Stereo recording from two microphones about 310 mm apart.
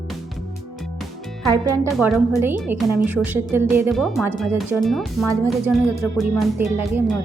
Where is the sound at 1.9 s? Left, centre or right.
Centre.